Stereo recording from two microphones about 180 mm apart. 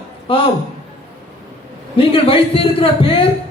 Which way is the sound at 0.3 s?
30° left (ahead or behind).